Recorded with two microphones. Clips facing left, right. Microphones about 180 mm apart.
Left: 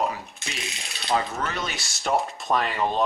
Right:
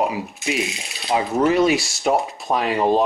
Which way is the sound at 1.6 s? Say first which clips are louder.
Right 15 dB; centre (ahead or behind).